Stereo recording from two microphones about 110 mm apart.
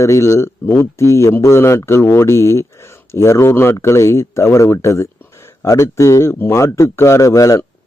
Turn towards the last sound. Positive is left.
turn(degrees=30)  # may be behind; listen again after turning